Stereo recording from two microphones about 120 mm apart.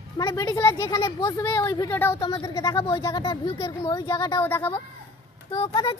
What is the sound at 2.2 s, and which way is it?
A child's voice, 35° left (ahead or behind).